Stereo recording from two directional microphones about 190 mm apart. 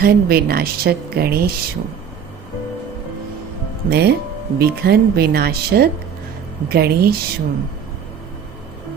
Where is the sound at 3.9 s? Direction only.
55° right (ahead or behind).